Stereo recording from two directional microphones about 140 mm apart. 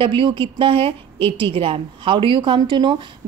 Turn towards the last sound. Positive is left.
turn(degrees=-35)  # may be behind; listen again after turning